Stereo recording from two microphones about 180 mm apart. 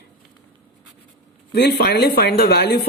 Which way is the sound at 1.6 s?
65° left (ahead or behind).